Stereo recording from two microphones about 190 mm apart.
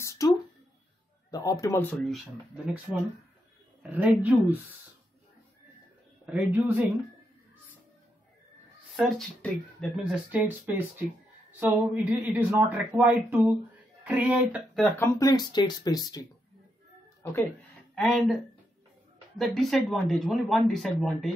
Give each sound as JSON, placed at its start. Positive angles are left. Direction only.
{"t": 0.2, "sound": "a sound", "side_deg": 15}
{"t": 1.3, "sound": "speech", "side_deg": 20}
{"t": 3.9, "sound": "speech", "side_deg": -10}
{"t": 6.2, "sound": "speech", "side_deg": -5}
{"t": 8.9, "sound": "speech", "side_deg": 0}
{"t": 15.0, "sound": "speech", "side_deg": 15}
{"t": 17.9, "sound": "speech", "side_deg": 0}
{"t": 19.3, "sound": "speech", "side_deg": 0}